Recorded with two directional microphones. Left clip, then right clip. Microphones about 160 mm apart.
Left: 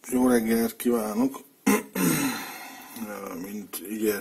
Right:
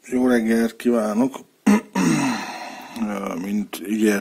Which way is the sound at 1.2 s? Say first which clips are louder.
Right 4 dB; 40° right (ahead or behind).